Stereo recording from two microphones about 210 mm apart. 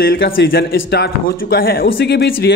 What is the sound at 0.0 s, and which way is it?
A man's voice, 50° left (ahead or behind).